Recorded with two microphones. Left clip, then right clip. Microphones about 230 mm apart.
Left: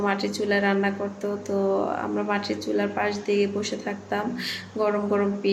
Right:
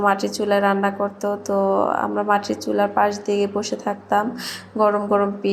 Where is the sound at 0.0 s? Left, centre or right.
Centre.